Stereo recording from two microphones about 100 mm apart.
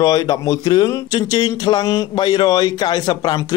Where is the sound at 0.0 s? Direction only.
40° left (ahead or behind).